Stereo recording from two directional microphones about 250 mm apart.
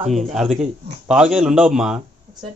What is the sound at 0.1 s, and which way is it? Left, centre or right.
Speech, centre.